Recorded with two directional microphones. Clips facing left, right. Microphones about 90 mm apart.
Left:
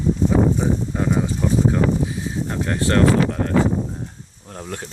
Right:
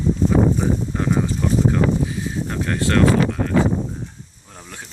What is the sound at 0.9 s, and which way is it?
Sizzle, 10° left (ahead or behind).